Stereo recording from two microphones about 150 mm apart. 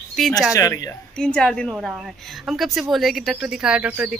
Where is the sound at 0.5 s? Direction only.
20° left (ahead or behind).